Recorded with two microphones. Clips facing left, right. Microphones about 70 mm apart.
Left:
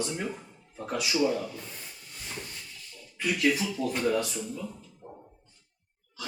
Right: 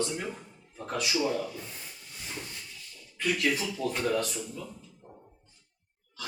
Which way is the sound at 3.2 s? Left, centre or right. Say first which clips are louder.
Left 2 dB; centre.